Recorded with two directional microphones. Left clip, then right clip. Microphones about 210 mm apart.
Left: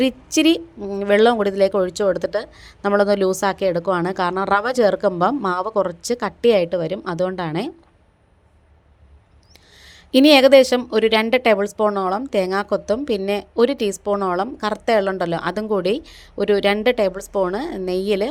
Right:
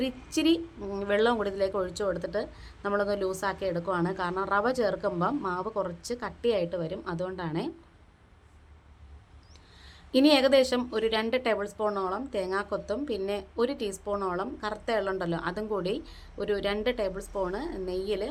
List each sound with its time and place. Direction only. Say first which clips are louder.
0.0 s speech: left 11 dB; 35° left (ahead or behind)
0.8 s speech: left 11 dB; 25° left (ahead or behind)
9.8 s speech: left 9 dB; 35° left (ahead or behind)